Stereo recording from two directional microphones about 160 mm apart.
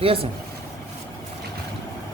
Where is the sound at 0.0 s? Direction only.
35° right (ahead or behind).